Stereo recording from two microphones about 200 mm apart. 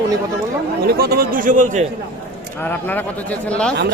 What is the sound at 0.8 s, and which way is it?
Speech, 50° right (ahead or behind).